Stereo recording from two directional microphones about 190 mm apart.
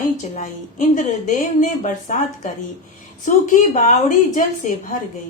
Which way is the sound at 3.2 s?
40° left (ahead or behind).